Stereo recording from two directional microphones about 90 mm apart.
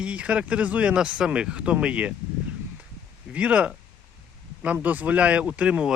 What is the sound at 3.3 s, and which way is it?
Speech, 15° right (ahead or behind).